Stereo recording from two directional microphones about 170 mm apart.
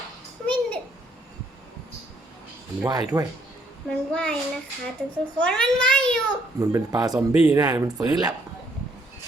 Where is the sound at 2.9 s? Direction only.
20° right (ahead or behind).